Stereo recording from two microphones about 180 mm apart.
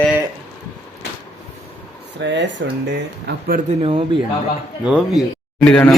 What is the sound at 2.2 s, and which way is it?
Speech, 75° right (ahead or behind).